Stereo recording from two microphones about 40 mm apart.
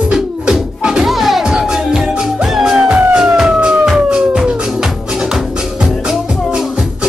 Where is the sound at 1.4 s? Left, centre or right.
Centre.